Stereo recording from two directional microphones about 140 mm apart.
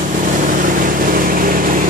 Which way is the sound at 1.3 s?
85° right.